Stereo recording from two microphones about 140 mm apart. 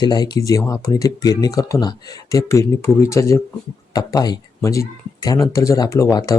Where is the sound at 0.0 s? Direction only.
30° left (ahead or behind).